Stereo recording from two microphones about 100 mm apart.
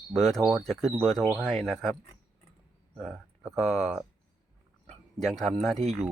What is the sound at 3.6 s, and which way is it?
Speech, 90° right.